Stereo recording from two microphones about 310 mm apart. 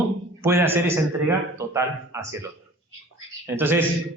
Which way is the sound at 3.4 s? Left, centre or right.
Centre.